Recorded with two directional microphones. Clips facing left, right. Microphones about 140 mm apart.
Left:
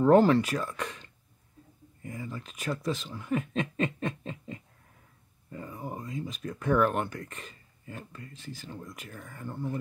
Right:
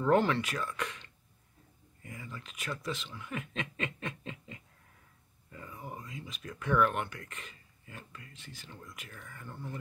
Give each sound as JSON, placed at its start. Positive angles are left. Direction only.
{"t": 0.0, "sound": "speech", "side_deg": 35}
{"t": 2.0, "sound": "speech", "side_deg": 35}
{"t": 5.5, "sound": "a sound", "side_deg": 35}
{"t": 6.5, "sound": "speech", "side_deg": 35}